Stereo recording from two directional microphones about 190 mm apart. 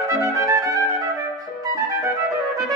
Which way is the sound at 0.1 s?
15° right (ahead or behind).